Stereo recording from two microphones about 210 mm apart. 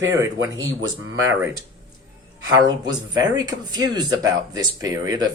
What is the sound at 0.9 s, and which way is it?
Speech, 15° right (ahead or behind).